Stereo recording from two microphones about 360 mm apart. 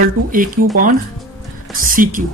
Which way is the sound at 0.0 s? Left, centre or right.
Right.